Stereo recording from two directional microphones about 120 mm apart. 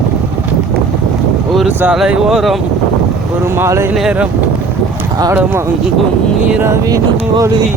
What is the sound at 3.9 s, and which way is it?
Speech, 5° right (ahead or behind).